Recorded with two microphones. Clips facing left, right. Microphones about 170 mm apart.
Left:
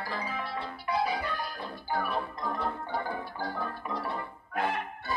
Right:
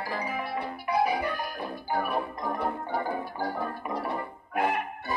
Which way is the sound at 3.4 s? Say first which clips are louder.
Right 3 dB; 25° right (ahead or behind).